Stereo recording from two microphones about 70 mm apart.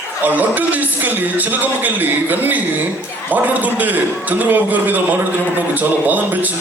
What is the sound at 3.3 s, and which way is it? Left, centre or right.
A man's voice, right.